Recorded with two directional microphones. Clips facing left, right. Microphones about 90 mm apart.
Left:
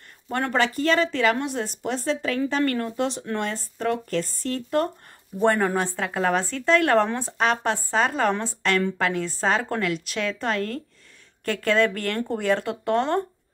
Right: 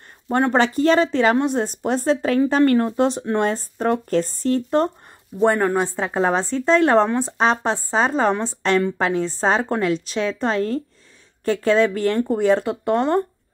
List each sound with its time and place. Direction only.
0.3 s speech: 30° right (ahead or behind)
5.4 s speech: 5° right (ahead or behind)
5.9 s speech: 20° right (ahead or behind)